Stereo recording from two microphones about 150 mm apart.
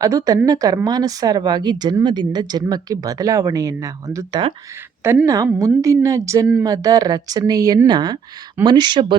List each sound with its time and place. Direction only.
0.0 s speech: 25° right (ahead or behind)